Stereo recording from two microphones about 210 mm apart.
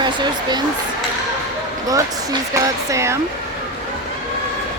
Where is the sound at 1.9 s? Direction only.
15° right (ahead or behind).